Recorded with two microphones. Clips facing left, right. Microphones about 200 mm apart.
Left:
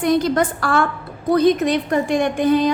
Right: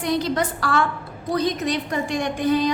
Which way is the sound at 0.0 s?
50° left (ahead or behind).